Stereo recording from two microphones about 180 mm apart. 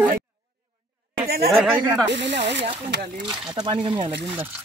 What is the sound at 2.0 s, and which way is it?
Speech, 75° right (ahead or behind).